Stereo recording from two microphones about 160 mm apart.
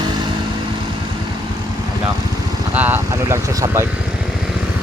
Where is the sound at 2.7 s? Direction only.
10° right (ahead or behind).